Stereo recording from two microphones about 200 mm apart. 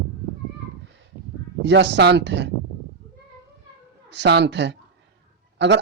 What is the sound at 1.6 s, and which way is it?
Speech, 60° right (ahead or behind).